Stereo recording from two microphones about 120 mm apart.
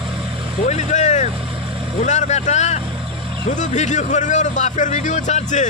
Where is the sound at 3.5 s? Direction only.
85° left.